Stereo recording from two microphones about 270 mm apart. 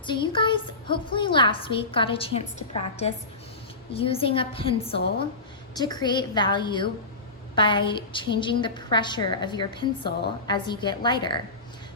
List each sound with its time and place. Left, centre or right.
0.0 s a woman's voice: centre
5.7 s a woman's voice: centre